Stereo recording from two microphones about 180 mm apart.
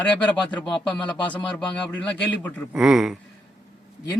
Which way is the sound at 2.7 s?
5° right (ahead or behind).